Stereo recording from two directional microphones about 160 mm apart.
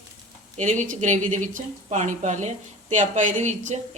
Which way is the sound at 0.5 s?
45° right (ahead or behind).